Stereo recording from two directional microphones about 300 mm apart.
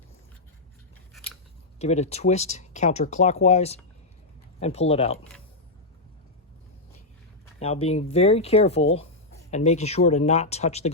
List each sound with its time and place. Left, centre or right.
1.8 s speech: left
7.6 s speech: centre